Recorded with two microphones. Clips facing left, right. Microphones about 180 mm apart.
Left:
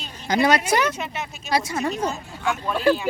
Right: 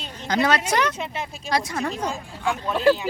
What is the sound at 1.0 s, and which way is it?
Speech, 30° right (ahead or behind).